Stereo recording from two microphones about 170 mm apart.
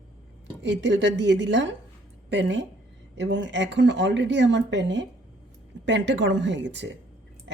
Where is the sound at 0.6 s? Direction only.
90° right.